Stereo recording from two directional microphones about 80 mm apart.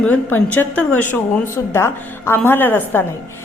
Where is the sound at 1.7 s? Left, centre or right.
Left.